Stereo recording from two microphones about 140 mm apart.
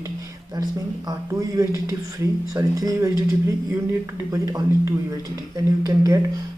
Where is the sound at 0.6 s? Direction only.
25° right (ahead or behind).